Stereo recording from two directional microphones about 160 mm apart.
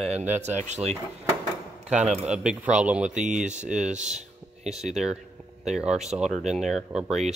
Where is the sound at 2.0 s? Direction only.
45° right (ahead or behind).